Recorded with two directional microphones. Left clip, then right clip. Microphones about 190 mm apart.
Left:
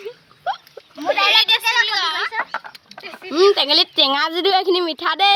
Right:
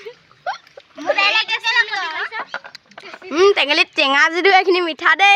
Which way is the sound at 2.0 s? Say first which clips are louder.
Left 3 dB; 35° right (ahead or behind).